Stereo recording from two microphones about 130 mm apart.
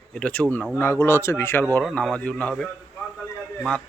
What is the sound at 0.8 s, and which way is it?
Speech, 20° left (ahead or behind).